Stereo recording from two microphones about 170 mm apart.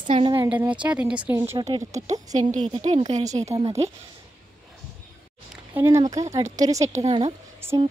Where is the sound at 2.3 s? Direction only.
45° right (ahead or behind).